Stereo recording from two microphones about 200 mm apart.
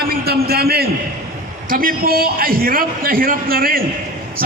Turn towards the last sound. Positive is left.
turn(degrees=-45)  # may be behind; listen again after turning